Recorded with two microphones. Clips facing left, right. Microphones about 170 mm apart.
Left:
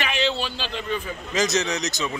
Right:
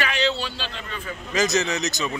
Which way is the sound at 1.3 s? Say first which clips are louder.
Right 1 dB; centre (ahead or behind).